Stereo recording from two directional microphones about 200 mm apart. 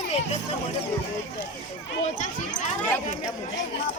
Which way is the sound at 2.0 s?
35° left (ahead or behind).